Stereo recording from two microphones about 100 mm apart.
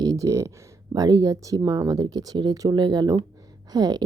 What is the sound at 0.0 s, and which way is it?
A woman's voice, 35° right (ahead or behind).